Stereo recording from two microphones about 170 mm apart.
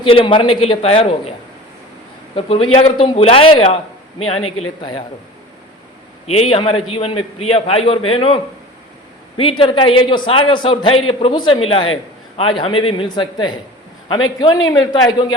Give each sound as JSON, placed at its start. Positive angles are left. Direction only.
{"t": 0.0, "sound": "a man's voice", "side_deg": 30}
{"t": 2.3, "sound": "a man's voice", "side_deg": 35}
{"t": 6.2, "sound": "a man's voice", "side_deg": 35}
{"t": 9.4, "sound": "a man's voice", "side_deg": 30}